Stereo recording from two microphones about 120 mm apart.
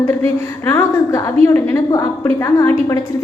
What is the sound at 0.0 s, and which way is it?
A woman's voice, 20° left (ahead or behind).